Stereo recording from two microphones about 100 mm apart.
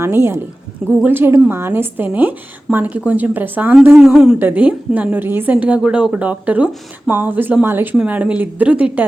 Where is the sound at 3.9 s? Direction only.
10° right (ahead or behind).